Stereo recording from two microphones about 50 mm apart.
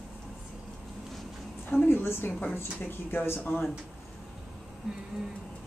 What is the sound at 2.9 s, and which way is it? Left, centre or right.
Speech, left.